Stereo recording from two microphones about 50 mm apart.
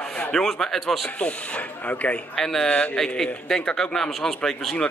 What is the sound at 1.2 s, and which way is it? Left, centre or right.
Speech, left.